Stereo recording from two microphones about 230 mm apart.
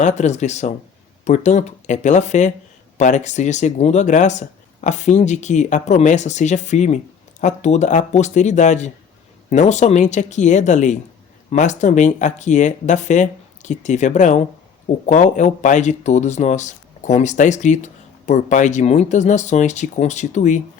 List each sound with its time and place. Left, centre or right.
0.0 s speech: left